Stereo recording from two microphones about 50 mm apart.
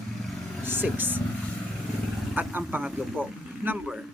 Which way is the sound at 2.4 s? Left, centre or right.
Right.